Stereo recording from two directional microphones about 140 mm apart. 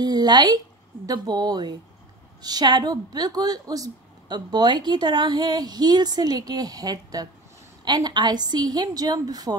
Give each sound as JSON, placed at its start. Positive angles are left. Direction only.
{"t": 0.0, "sound": "a woman's voice", "side_deg": -30}